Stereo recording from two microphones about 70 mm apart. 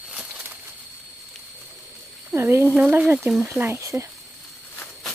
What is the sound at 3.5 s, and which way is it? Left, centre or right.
Speech, right.